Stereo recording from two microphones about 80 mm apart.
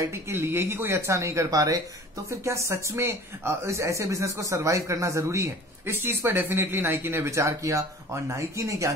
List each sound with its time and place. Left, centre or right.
0.0 s speech: right